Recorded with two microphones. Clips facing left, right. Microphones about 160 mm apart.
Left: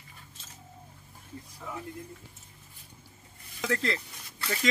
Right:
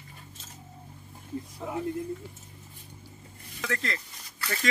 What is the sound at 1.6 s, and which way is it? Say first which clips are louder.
Speech: right 5 dB; 45° right (ahead or behind).